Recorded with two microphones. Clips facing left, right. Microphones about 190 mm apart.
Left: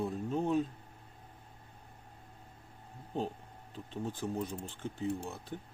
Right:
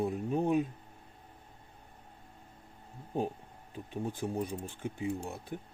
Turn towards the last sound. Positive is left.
turn(degrees=-15)  # may be behind; listen again after turning